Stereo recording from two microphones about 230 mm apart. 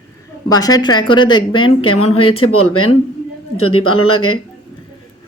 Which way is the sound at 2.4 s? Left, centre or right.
Left.